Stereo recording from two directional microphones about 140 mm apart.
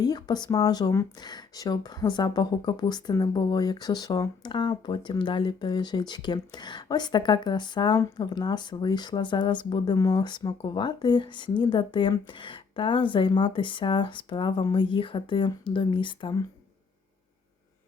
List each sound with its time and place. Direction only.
0.0 s speech: 30° left (ahead or behind)